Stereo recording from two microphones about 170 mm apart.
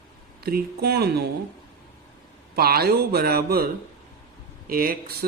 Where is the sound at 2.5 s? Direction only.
65° right (ahead or behind).